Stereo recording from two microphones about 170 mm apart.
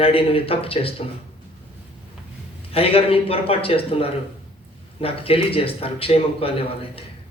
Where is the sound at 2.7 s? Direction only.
35° left (ahead or behind).